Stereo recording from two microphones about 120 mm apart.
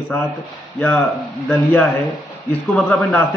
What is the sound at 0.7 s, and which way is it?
Speech, 15° left (ahead or behind).